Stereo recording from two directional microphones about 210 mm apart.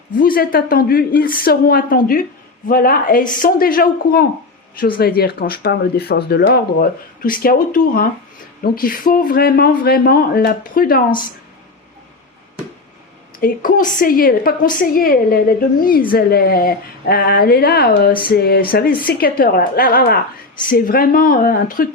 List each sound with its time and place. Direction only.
0.2 s speech: 40° left (ahead or behind)
13.4 s speech: 40° left (ahead or behind)